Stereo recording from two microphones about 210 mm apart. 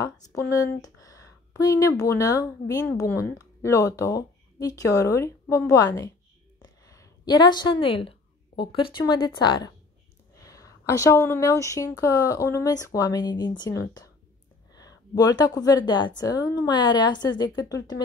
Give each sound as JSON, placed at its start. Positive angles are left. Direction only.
{"t": 0.0, "sound": "a woman's voice", "side_deg": 15}